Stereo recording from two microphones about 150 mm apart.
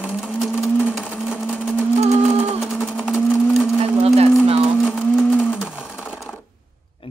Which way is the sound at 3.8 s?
40° right (ahead or behind).